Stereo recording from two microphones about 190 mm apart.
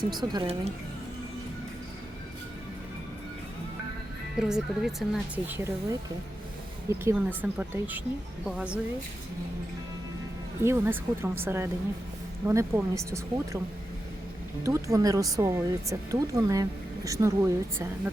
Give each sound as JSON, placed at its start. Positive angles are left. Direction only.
{"t": 0.3, "sound": "speech", "side_deg": -30}
{"t": 4.4, "sound": "speech", "side_deg": -5}
{"t": 5.5, "sound": "speech", "side_deg": -15}
{"t": 7.0, "sound": "speech", "side_deg": -10}
{"t": 10.6, "sound": "speech", "side_deg": -15}
{"t": 14.6, "sound": "speech", "side_deg": -15}